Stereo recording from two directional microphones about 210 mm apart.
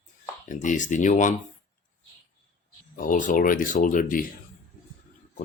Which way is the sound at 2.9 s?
40° left (ahead or behind).